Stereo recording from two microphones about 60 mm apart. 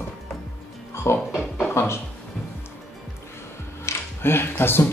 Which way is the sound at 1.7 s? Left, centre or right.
Left.